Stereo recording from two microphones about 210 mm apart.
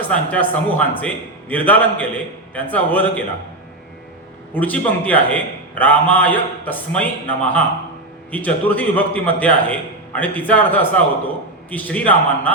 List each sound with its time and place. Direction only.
0.1 s a man's voice: 5° left (ahead or behind)
4.5 s a man's voice: 5° left (ahead or behind)